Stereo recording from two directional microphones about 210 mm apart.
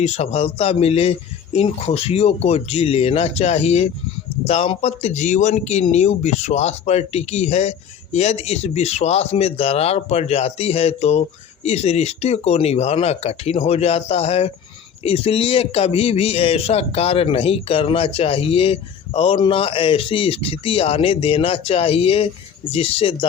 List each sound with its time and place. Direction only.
0.0 s a man's voice: 30° left (ahead or behind)